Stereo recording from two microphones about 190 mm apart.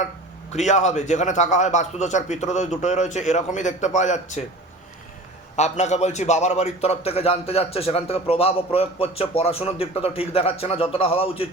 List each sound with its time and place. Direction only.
0.5 s a man's voice: 35° left (ahead or behind)
5.5 s a man's voice: 35° left (ahead or behind)